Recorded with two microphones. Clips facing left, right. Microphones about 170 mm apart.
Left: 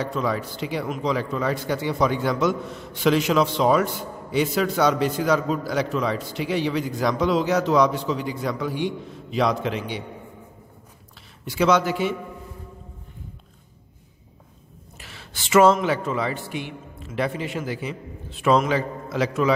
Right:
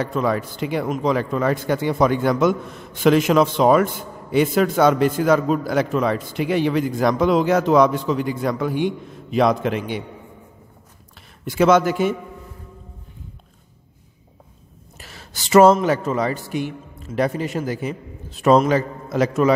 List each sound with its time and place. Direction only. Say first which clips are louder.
0.0 s speech: right 4 dB; 55° right (ahead or behind)
11.4 s speech: right 4 dB; 50° right (ahead or behind)
15.0 s speech: right 2 dB; 40° right (ahead or behind)